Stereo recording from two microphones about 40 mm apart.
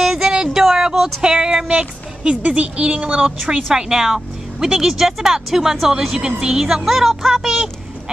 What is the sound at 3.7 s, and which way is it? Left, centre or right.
A woman's voice, centre.